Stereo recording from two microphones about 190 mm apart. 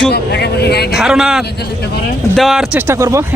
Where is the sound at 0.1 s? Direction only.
60° left (ahead or behind).